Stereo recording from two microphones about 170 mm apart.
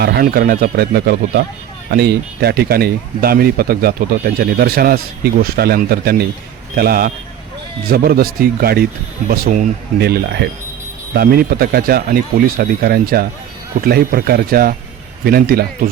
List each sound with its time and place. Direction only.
0.0 s speech: 65° right (ahead or behind)
10.0 s speech: 70° right (ahead or behind)